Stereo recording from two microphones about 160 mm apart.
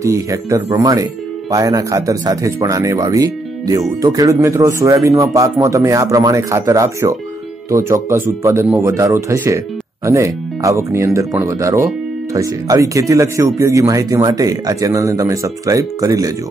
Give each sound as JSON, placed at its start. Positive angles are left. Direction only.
{"t": 0.0, "sound": "speech", "side_deg": -20}